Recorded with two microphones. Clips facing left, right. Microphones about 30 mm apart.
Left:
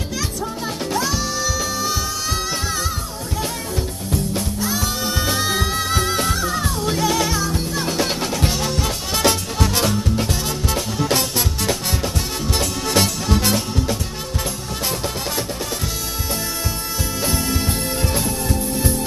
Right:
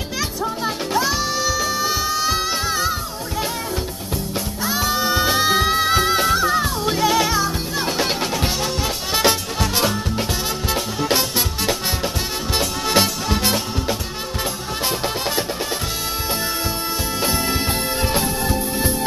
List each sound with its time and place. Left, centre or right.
0.9 s music: centre
4.1 s music: centre
17.2 s music: right